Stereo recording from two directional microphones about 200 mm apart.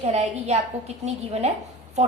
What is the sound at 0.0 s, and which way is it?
A woman's voice, 35° right (ahead or behind).